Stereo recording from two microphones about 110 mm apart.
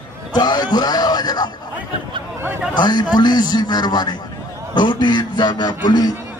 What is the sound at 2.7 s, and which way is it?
A man's voice, 40° left (ahead or behind).